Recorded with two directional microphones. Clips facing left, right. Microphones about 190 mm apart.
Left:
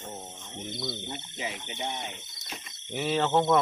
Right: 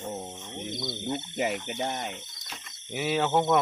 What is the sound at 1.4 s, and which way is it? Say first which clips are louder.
Speech: right 6 dB; 60° right (ahead or behind).